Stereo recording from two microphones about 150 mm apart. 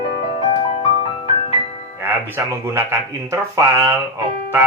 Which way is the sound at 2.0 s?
15° right (ahead or behind).